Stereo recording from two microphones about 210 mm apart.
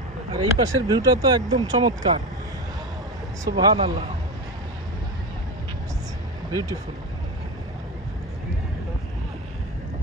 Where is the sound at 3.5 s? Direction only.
20° right (ahead or behind).